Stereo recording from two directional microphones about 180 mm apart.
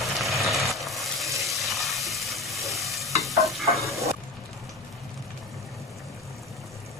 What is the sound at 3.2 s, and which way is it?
Stir, centre (ahead or behind).